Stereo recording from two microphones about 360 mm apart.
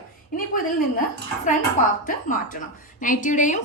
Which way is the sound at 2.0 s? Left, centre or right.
Left.